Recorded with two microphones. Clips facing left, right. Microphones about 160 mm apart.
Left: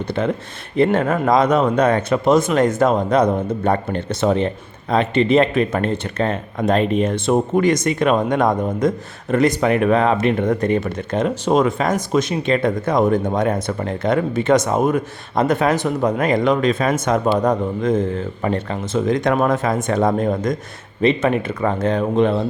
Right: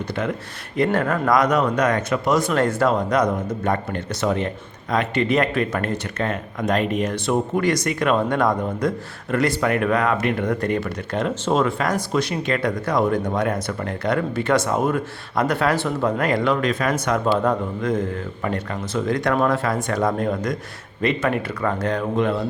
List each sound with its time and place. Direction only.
0.1 s speech: 30° left (ahead or behind)